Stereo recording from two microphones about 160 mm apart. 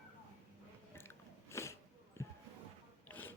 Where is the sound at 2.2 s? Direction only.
15° left (ahead or behind).